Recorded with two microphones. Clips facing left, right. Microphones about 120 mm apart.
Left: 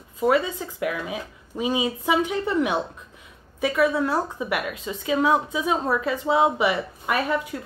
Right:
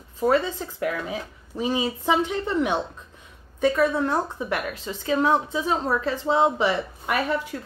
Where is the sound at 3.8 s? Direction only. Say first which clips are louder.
Left 1 dB; 10° left (ahead or behind).